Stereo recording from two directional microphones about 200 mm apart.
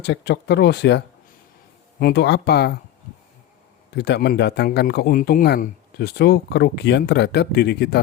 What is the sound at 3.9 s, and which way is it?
Speech, 55° left (ahead or behind).